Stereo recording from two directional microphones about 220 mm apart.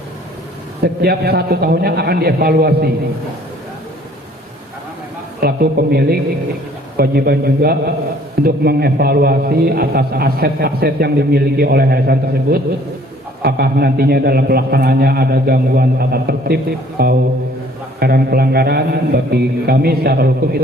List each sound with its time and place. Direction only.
1.0 s a man's voice: 45° right (ahead or behind)
5.4 s a man's voice: 45° right (ahead or behind)